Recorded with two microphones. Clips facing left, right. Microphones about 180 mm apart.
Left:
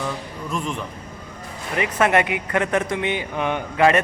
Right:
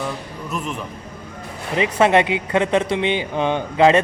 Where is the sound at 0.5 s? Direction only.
5° right (ahead or behind).